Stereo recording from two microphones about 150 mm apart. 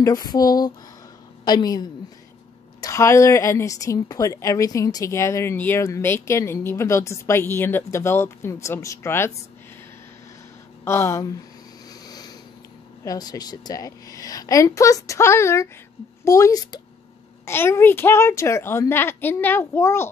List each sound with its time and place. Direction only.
0.0 s a woman's voice: 25° left (ahead or behind)
10.8 s speech: 15° left (ahead or behind)
12.1 s a sound: 25° left (ahead or behind)
13.0 s a woman's voice: 25° left (ahead or behind)